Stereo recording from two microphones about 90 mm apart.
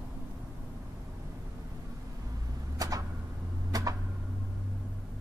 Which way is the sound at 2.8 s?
45° right (ahead or behind).